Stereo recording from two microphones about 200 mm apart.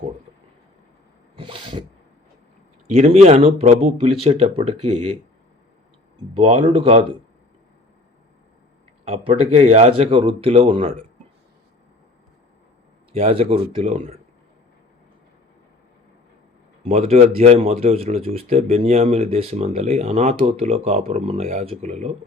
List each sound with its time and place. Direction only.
1.4 s sneeze: 25° right (ahead or behind)
2.9 s speech: 30° right (ahead or behind)
6.3 s speech: 25° right (ahead or behind)
9.0 s speech: 30° right (ahead or behind)
13.1 s speech: 30° right (ahead or behind)
16.8 s speech: 30° right (ahead or behind)